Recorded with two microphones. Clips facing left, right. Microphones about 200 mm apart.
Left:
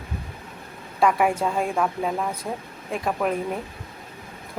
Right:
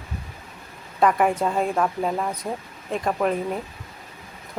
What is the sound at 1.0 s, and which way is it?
A woman's voice, centre (ahead or behind).